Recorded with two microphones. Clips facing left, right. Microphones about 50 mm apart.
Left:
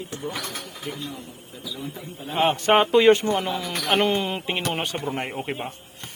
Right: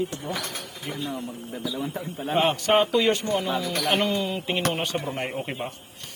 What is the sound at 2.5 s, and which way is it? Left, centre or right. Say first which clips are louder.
Speech: left 6 dB; left.